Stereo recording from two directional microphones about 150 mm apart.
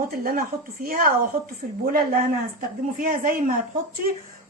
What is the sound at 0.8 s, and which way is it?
A woman's voice, 70° right (ahead or behind).